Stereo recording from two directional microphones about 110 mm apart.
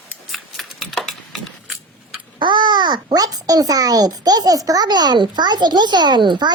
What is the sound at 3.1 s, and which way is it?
A child's voice, 35° right (ahead or behind).